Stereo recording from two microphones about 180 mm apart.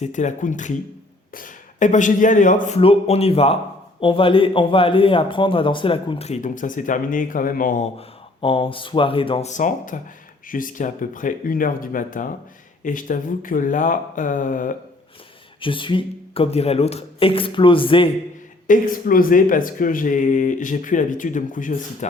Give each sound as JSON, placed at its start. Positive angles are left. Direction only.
{"t": 0.0, "sound": "a man's voice", "side_deg": 40}
{"t": 7.9, "sound": "a man's voice", "side_deg": 30}
{"t": 15.6, "sound": "a man's voice", "side_deg": 30}
{"t": 18.7, "sound": "speech", "side_deg": 50}